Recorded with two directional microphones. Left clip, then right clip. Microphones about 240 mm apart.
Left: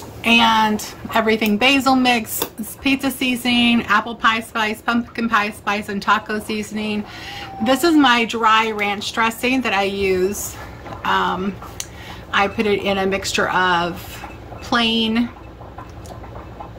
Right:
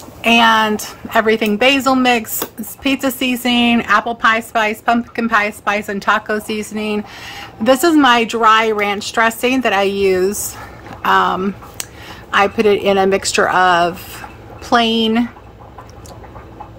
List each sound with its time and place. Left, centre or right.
0.2 s a woman's voice: centre